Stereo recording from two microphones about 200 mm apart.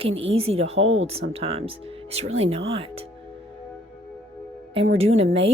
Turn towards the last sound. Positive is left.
turn(degrees=-30)  # may be behind; listen again after turning